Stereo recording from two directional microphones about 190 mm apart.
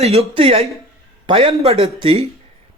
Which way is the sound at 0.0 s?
30° right (ahead or behind).